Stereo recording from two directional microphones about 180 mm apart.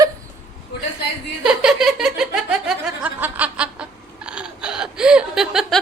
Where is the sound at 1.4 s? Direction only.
5° right (ahead or behind).